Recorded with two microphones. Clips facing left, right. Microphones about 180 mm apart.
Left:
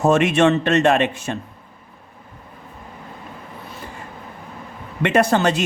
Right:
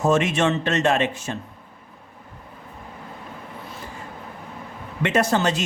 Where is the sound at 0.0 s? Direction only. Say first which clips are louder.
Left 4 dB; 65° left (ahead or behind).